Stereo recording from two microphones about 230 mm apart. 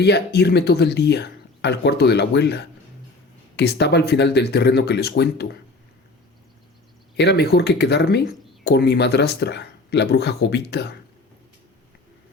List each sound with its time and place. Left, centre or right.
0.0 s speech: left
7.2 s speech: left